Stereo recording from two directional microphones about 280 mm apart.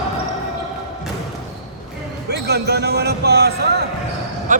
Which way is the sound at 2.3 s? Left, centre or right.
Right.